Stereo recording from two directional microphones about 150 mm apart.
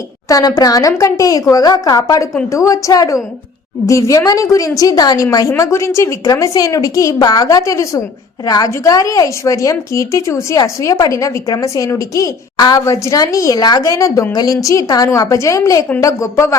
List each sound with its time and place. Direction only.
0.3 s a woman's voice: 25° left (ahead or behind)